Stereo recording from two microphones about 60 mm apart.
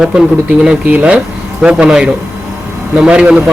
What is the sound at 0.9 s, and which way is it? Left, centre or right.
Speech, centre.